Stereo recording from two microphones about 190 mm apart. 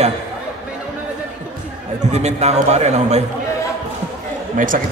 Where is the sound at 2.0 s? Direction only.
35° right (ahead or behind).